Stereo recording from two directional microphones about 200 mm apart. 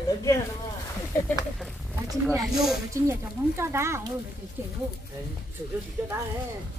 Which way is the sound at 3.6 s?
15° right (ahead or behind).